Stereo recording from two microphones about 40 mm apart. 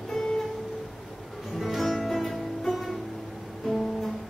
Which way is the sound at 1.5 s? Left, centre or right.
Centre.